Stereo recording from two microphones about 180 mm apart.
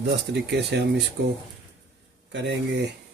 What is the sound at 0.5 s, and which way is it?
Speech, 65° right (ahead or behind).